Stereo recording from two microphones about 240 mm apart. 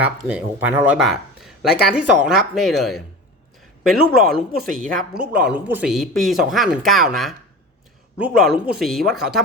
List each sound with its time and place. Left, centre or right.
0.0 s speech: centre